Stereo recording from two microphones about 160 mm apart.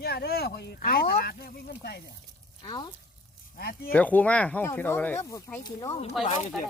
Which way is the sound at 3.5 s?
70° left (ahead or behind).